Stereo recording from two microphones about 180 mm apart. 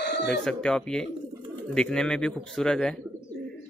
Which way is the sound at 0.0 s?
70° left (ahead or behind).